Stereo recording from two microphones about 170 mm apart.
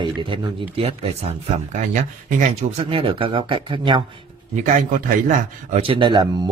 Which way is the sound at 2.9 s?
30° right (ahead or behind).